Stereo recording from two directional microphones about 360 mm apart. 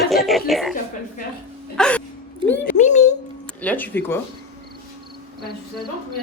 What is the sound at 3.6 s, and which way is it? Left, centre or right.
Speech, centre.